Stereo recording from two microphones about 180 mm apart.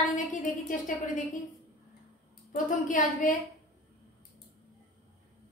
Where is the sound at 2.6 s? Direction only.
45° left (ahead or behind).